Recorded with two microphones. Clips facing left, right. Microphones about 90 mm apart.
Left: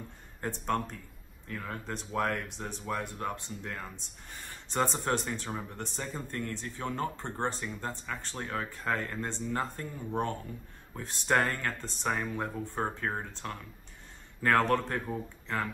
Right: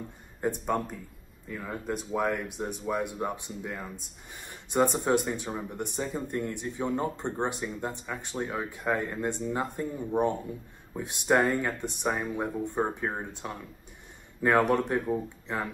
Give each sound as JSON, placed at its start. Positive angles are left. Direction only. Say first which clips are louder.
{"t": 0.7, "sound": "speech", "louder": "right 2 dB", "side_deg": -5}